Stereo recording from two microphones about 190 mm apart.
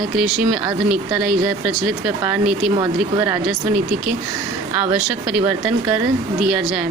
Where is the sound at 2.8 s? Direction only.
15° right (ahead or behind).